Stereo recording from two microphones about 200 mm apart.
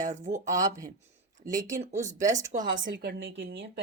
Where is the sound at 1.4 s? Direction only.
15° right (ahead or behind).